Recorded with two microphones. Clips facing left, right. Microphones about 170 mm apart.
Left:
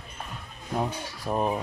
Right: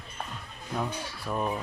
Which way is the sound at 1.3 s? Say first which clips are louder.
Left 4 dB; 35° left (ahead or behind).